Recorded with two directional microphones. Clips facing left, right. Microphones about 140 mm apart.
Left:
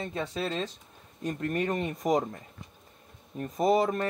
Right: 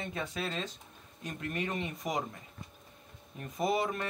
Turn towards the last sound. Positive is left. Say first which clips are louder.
# left 6 dB
turn(degrees=40)  # may be behind; listen again after turning